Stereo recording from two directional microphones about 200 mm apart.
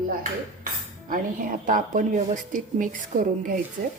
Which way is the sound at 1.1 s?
40° right (ahead or behind).